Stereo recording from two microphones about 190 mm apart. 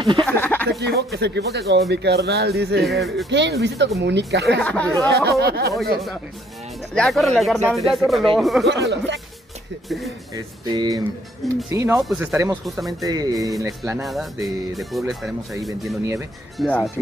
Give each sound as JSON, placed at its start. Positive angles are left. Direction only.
{"t": 0.2, "sound": "speech", "side_deg": 10}
{"t": 0.7, "sound": "speech", "side_deg": -60}
{"t": 2.8, "sound": "speech", "side_deg": 0}
{"t": 3.3, "sound": "speech", "side_deg": -65}
{"t": 4.6, "sound": "speech", "side_deg": 5}
{"t": 5.4, "sound": "speech", "side_deg": -55}
{"t": 6.9, "sound": "speech", "side_deg": 0}
{"t": 8.6, "sound": "speech", "side_deg": -65}
{"t": 9.8, "sound": "speech", "side_deg": 0}
{"t": 10.3, "sound": "speech", "side_deg": -20}
{"t": 12.0, "sound": "speech", "side_deg": -5}
{"t": 12.6, "sound": "speech", "side_deg": 0}
{"t": 13.0, "sound": "speech", "side_deg": -20}
{"t": 14.0, "sound": "speech", "side_deg": 0}